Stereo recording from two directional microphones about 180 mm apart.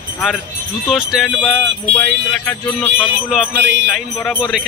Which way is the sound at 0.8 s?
Centre (ahead or behind).